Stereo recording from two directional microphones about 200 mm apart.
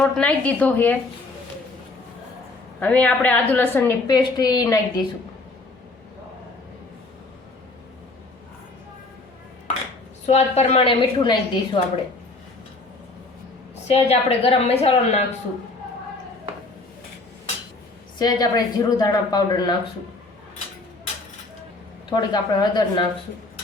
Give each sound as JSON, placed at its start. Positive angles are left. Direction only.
{"t": 0.0, "sound": "a woman's voice", "side_deg": 5}
{"t": 2.8, "sound": "a woman's voice", "side_deg": 5}
{"t": 10.2, "sound": "speech", "side_deg": 35}
{"t": 13.8, "sound": "a woman's voice", "side_deg": 30}
{"t": 18.2, "sound": "speech", "side_deg": 20}
{"t": 22.1, "sound": "speech", "side_deg": 20}